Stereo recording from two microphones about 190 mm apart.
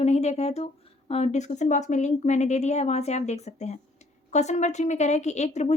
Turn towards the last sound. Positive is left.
turn(degrees=35)  # may be behind; listen again after turning